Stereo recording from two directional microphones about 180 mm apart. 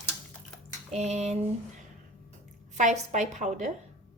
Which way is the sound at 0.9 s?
40° right (ahead or behind).